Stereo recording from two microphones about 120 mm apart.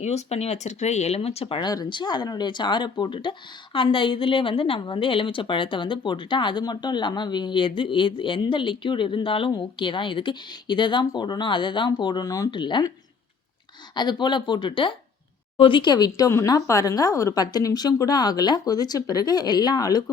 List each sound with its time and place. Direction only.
0.0 s speech: 65° left (ahead or behind)
1.6 s speech: 35° left (ahead or behind)
13.9 s speech: 40° left (ahead or behind)